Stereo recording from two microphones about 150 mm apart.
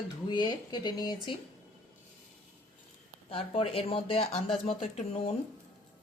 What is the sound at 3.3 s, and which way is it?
Speech, 40° left (ahead or behind).